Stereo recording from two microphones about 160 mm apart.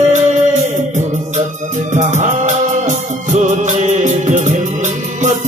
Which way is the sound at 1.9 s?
50° right (ahead or behind).